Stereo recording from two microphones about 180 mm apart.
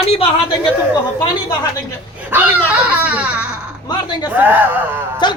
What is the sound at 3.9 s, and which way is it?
Speech, 25° left (ahead or behind).